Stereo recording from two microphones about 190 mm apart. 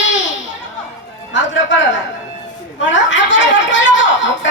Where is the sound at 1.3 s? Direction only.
75° left (ahead or behind).